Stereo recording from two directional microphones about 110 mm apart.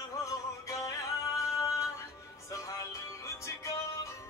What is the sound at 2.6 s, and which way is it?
Music, 30° left (ahead or behind).